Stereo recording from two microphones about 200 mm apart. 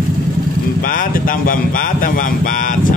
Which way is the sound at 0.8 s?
45° left (ahead or behind).